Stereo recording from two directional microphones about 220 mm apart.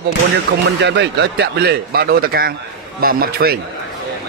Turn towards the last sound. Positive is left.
turn(degrees=-45)  # may be behind; listen again after turning